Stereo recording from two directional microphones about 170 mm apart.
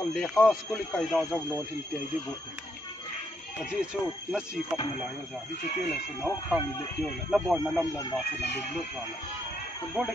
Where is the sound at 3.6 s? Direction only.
5° right (ahead or behind).